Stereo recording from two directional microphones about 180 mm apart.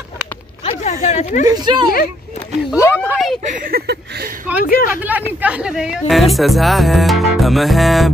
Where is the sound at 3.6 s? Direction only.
55° right (ahead or behind).